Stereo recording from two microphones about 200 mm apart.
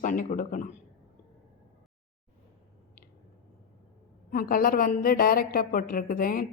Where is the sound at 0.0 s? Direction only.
40° left (ahead or behind).